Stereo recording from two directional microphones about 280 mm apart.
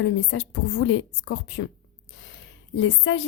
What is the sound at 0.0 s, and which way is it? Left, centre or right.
Speech, left.